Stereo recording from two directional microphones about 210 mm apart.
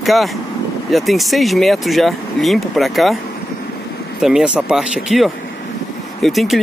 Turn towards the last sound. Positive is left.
turn(degrees=0)  # may be behind; listen again after turning